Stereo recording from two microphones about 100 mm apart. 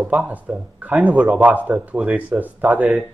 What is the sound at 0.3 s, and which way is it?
Speech, 15° right (ahead or behind).